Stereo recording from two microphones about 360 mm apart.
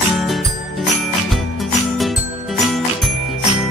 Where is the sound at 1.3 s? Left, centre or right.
Centre.